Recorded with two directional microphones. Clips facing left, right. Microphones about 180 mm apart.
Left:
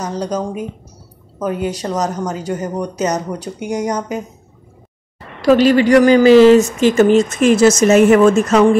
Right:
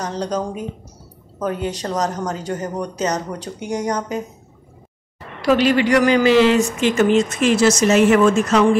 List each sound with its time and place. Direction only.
0.0 s speech: 10° left (ahead or behind)
5.4 s a woman's voice: 40° left (ahead or behind)